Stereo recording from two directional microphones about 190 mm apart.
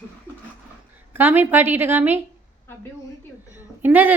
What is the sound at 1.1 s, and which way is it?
A woman's voice, 10° right (ahead or behind).